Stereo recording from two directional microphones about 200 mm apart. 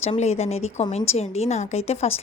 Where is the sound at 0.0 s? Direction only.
30° left (ahead or behind).